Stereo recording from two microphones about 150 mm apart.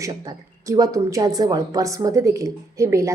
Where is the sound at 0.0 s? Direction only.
20° right (ahead or behind).